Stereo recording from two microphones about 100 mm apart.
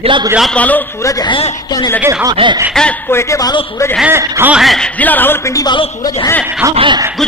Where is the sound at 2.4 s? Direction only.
60° right (ahead or behind).